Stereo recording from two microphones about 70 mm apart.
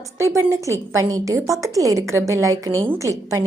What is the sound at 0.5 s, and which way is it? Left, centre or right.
A woman's voice, right.